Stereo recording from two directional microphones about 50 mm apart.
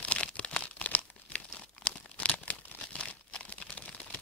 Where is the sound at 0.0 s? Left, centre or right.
Left.